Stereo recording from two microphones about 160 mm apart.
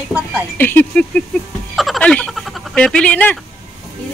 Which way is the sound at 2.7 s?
5° left (ahead or behind).